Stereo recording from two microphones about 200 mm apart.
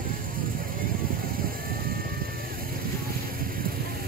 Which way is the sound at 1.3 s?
45° right (ahead or behind).